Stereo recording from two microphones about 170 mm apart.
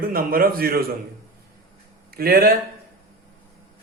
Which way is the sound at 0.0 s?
60° right (ahead or behind).